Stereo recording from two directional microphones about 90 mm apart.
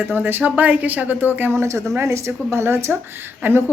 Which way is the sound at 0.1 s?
20° right (ahead or behind).